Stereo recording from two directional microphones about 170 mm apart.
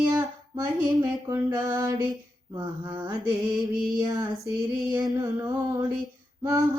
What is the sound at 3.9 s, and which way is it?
Speech, 25° right (ahead or behind).